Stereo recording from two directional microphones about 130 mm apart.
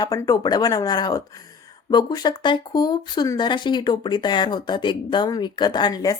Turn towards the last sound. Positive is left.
turn(degrees=30)  # may be behind; listen again after turning